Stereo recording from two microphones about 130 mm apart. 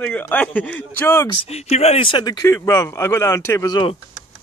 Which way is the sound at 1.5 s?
55° left (ahead or behind).